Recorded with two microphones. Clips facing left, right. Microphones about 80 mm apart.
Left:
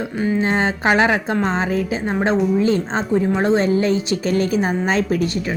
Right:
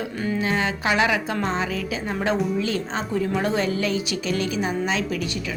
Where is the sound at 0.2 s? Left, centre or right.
Left.